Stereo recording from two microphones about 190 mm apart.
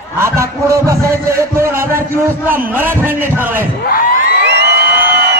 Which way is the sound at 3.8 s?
50° left (ahead or behind).